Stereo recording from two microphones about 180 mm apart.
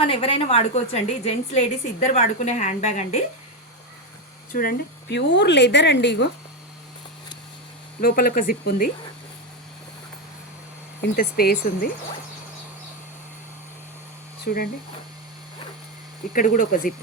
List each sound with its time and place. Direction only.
0.0 s a woman's voice: 30° left (ahead or behind)
4.5 s speech: 55° left (ahead or behind); by 6.2 s 75° left (ahead or behind)
8.0 s speech: 55° left (ahead or behind)
11.0 s speech: 60° left (ahead or behind)
14.4 s speech: 55° left (ahead or behind)
16.3 s speech: 50° left (ahead or behind)